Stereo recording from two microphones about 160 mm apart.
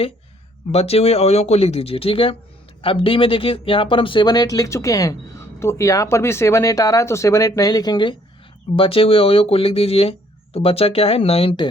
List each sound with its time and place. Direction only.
0.7 s speech: 40° left (ahead or behind)